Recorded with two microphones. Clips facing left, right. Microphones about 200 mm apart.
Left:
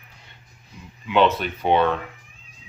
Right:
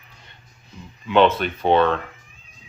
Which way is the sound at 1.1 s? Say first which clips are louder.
Right 2 dB; 15° left (ahead or behind).